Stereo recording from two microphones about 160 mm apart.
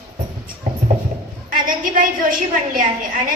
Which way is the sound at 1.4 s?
60° right (ahead or behind).